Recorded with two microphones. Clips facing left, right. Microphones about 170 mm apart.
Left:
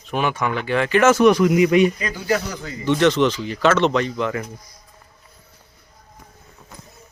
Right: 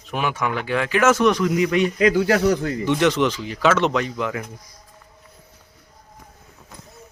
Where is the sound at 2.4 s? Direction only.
55° right (ahead or behind).